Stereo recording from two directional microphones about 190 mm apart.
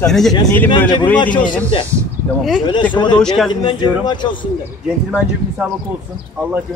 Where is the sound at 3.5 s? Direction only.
25° left (ahead or behind).